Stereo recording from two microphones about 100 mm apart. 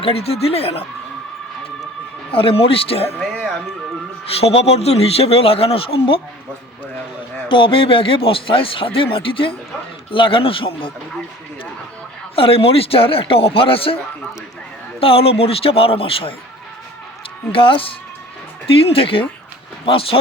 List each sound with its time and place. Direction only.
0.0 s speech: 80° left
2.3 s speech: 65° left (ahead or behind)
4.4 s speech: 90° left; by 6.2 s 70° left (ahead or behind)
7.4 s speech: 60° left (ahead or behind)
12.4 s speech: 70° left (ahead or behind)
15.0 s speech: 70° left (ahead or behind)
17.5 s speech: 60° left (ahead or behind)